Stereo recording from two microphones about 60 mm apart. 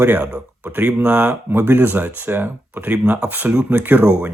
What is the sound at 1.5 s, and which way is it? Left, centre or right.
Speech, right.